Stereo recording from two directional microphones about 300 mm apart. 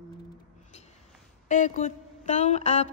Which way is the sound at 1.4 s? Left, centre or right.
Left.